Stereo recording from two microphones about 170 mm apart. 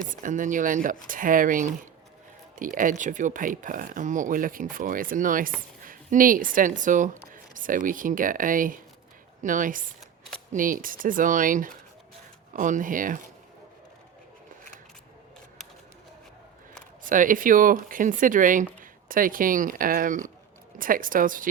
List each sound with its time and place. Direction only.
0.0 s speech: 50° right (ahead or behind)
17.0 s speech: 50° right (ahead or behind)